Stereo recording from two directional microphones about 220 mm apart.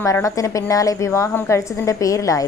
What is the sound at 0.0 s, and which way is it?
A woman's voice, 15° left (ahead or behind).